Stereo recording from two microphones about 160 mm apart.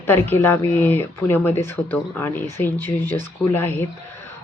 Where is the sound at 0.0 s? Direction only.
15° left (ahead or behind).